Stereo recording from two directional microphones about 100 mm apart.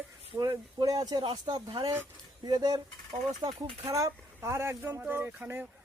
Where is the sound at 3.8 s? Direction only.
30° right (ahead or behind).